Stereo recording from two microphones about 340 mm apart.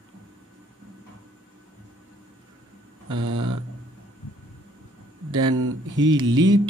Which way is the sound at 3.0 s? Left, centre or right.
Right.